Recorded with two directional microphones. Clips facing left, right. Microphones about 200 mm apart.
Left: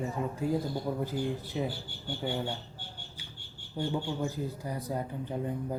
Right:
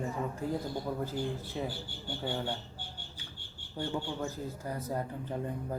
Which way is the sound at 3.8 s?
15° left (ahead or behind).